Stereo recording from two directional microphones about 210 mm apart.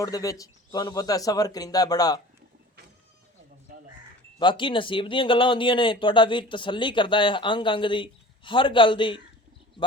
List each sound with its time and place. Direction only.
0.0 s speech: 15° left (ahead or behind)
4.4 s speech: 20° left (ahead or behind)